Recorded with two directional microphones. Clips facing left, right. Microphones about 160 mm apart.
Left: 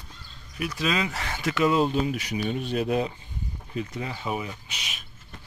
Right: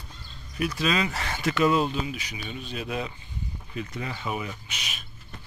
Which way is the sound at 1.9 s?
50° left (ahead or behind).